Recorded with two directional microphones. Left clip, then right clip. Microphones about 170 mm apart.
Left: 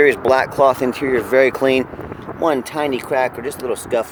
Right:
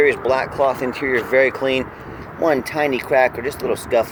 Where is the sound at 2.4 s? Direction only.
15° left (ahead or behind).